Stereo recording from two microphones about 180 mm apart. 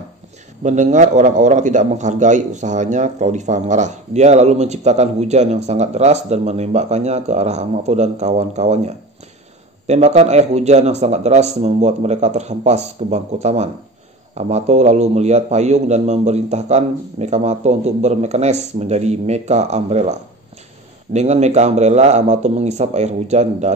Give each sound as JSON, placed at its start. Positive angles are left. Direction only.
{"t": 0.7, "sound": "a man's voice", "side_deg": -40}